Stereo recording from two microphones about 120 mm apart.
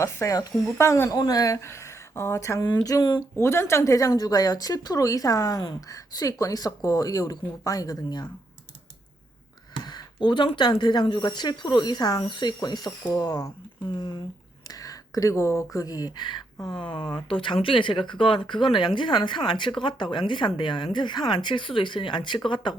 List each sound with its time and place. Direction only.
0.0 s speech: 25° left (ahead or behind)
1.1 s speech: 35° left (ahead or behind)
2.6 s speech: 35° left (ahead or behind)
3.3 s speech: 20° left (ahead or behind)
9.8 s speech: 40° left (ahead or behind)